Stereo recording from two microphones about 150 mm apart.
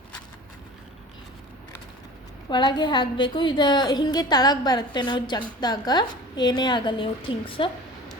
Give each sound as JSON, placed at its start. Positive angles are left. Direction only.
{"t": 2.5, "sound": "a woman's voice", "side_deg": 30}